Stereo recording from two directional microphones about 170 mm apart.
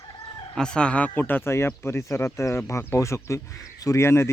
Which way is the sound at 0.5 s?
5° left (ahead or behind).